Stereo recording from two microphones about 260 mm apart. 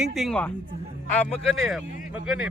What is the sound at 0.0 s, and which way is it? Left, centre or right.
A man's voice, centre.